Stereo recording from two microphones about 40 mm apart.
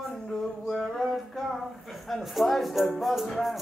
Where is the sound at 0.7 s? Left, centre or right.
Centre.